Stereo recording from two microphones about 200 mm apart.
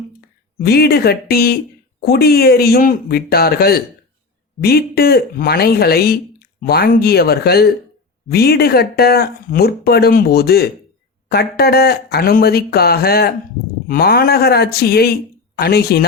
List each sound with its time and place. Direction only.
0.6 s speech: 50° left (ahead or behind)